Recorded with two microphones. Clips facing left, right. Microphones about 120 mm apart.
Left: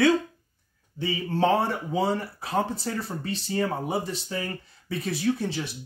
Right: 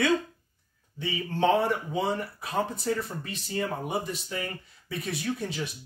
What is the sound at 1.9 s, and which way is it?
Speech, 30° left (ahead or behind).